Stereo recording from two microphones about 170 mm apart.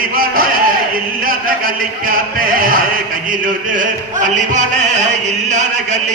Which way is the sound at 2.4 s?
55° right (ahead or behind).